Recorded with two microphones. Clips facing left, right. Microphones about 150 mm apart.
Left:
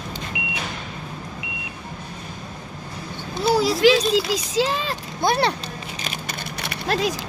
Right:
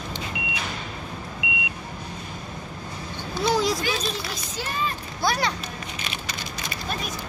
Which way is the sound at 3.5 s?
5° left (ahead or behind).